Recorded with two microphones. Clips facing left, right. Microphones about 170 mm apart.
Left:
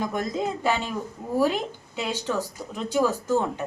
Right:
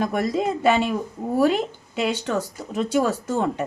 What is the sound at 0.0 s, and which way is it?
Speech, 75° right (ahead or behind).